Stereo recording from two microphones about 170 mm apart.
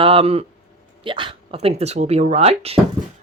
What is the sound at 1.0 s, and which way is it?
Speech, 30° right (ahead or behind).